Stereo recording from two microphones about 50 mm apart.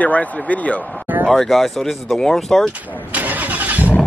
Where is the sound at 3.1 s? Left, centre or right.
Right.